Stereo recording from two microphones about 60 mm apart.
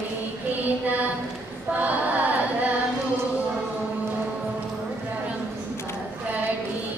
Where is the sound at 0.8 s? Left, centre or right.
Right.